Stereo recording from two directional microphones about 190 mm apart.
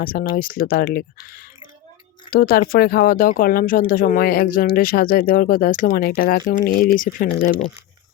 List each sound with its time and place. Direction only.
0.0 s speech: 50° left (ahead or behind)